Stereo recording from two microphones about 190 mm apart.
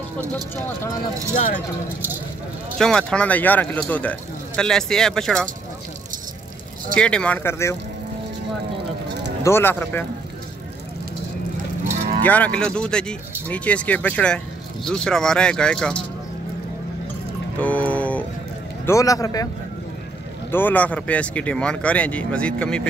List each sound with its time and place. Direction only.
2.8 s speech: 5° left (ahead or behind)
7.0 s speech: 5° left (ahead or behind)
9.4 s speech: 15° left (ahead or behind)
12.2 s speech: 10° left (ahead or behind)
17.6 s music: 5° left (ahead or behind)
18.9 s speech: 15° left (ahead or behind)
20.5 s speech: 10° left (ahead or behind)